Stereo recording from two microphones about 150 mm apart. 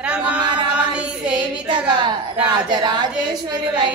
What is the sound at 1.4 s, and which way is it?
A woman's voice, 30° right (ahead or behind).